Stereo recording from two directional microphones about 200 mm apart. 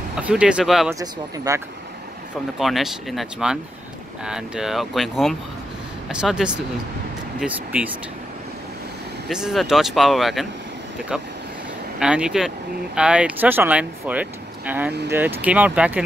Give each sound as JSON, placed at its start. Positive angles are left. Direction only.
{"t": 0.2, "sound": "speech", "side_deg": -5}
{"t": 0.9, "sound": "speech", "side_deg": -15}
{"t": 2.6, "sound": "speech", "side_deg": 0}
{"t": 9.3, "sound": "speech", "side_deg": 0}
{"t": 12.0, "sound": "speech", "side_deg": -5}